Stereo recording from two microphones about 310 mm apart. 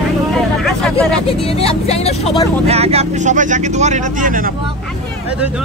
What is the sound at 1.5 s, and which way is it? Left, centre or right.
Speech, centre.